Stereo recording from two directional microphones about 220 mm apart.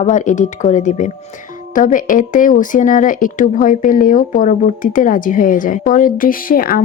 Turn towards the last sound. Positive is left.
turn(degrees=40)  # may be behind; listen again after turning